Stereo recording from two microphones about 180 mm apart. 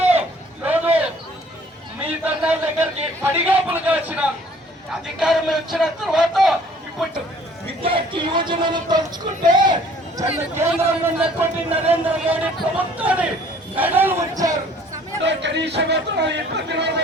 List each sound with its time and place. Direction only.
0.6 s a sound: 10° right (ahead or behind)
2.0 s a sound: 10° right (ahead or behind)
3.3 s a man's voice: 10° right (ahead or behind)
7.8 s child singing: 30° right (ahead or behind)
10.5 s a man's voice: 15° right (ahead or behind)
15.2 s a man's voice: 75° right (ahead or behind)